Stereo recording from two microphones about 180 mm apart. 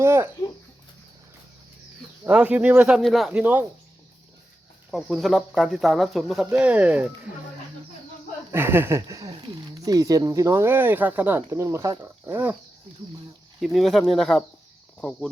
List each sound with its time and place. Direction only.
0.0 s speech: 15° right (ahead or behind)
2.2 s speech: 10° right (ahead or behind)
4.9 s speech: centre (ahead or behind)
8.5 s speech: 10° right (ahead or behind)
13.6 s speech: centre (ahead or behind)